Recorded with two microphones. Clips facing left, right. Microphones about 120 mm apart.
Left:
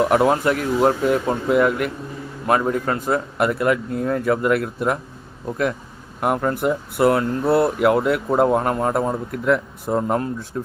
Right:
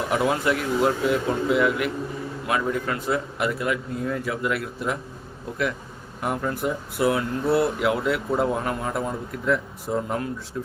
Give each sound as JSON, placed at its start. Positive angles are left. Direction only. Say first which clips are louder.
{"t": 0.1, "sound": "speech", "louder": "left 5 dB", "side_deg": 50}
{"t": 6.1, "sound": "speech", "louder": "left 6 dB", "side_deg": 55}